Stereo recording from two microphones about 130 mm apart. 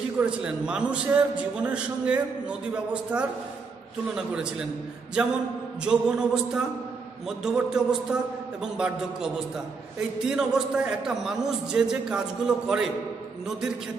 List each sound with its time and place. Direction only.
0.2 s a man's voice: 5° right (ahead or behind)
5.9 s a man's voice: 5° right (ahead or behind)